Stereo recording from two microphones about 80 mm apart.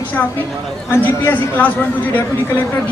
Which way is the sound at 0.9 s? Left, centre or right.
Left.